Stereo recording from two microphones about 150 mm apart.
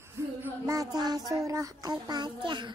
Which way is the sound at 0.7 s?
25° right (ahead or behind).